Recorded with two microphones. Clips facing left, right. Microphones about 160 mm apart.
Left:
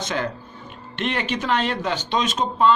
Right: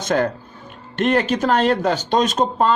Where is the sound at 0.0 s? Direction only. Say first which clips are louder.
Right 7 dB; 45° right (ahead or behind).